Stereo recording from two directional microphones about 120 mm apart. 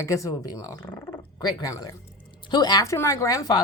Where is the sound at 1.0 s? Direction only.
20° left (ahead or behind).